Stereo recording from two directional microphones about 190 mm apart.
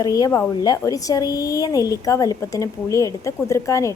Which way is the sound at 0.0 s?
20° left (ahead or behind).